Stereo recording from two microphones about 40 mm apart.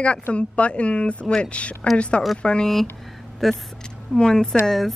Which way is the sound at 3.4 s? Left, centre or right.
Centre.